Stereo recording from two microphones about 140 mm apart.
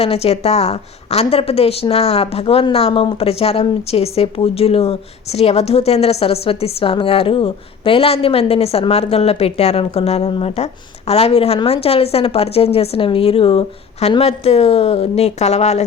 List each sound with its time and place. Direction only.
0.0 s a woman's voice: 45° left (ahead or behind)